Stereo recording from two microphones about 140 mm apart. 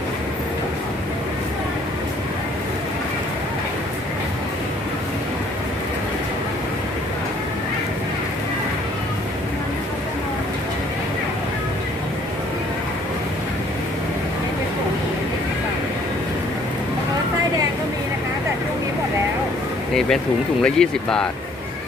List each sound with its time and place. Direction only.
20.7 s speech: 5° left (ahead or behind)